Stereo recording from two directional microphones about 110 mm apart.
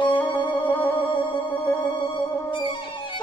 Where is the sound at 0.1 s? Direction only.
15° left (ahead or behind).